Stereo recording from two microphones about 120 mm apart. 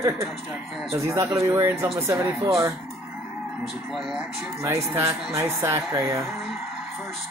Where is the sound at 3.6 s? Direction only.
5° right (ahead or behind).